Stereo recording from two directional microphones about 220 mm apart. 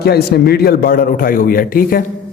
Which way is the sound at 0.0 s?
45° left (ahead or behind).